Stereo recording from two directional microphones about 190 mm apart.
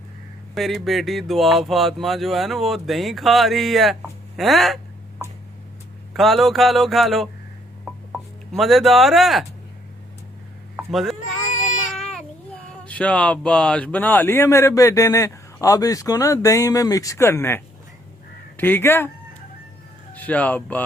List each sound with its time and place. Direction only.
0.5 s speech: centre (ahead or behind)
6.1 s speech: centre (ahead or behind)
8.5 s speech: centre (ahead or behind)
10.8 s a sound: centre (ahead or behind)
12.8 s speech: 5° left (ahead or behind)
20.1 s speech: 10° left (ahead or behind)